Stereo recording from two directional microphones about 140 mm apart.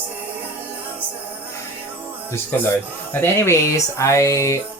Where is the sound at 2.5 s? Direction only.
15° left (ahead or behind).